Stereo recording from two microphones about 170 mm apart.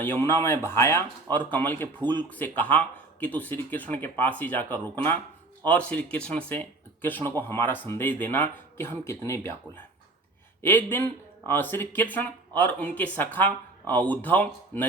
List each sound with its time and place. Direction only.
0.0 s speech: 10° left (ahead or behind)